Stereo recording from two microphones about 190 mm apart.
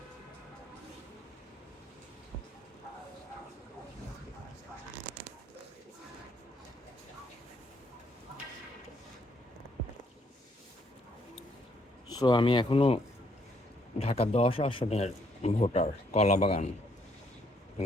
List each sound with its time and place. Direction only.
12.2 s speech: 25° left (ahead or behind)
14.0 s a man's voice: 30° left (ahead or behind)